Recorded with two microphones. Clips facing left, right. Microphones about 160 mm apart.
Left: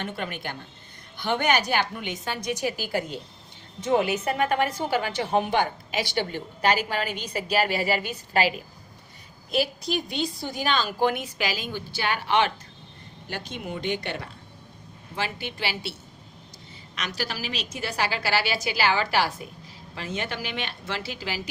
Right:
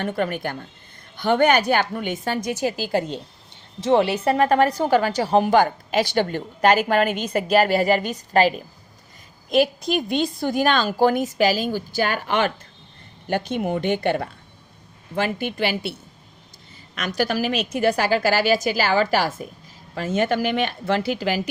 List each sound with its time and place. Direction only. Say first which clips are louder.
0.0 s a woman's voice: right 8 dB; 50° right (ahead or behind)
3.8 s a woman's voice: right 5 dB; 30° right (ahead or behind); by 10.9 s 50° right (ahead or behind)
10.9 s a woman's voice: right 6 dB; 40° right (ahead or behind); by 21.4 s 55° right (ahead or behind)